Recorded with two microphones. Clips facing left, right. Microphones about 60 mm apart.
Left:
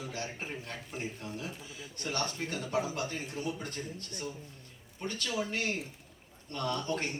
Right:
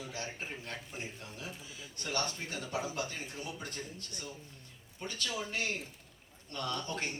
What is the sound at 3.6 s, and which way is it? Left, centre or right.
A man's voice, left.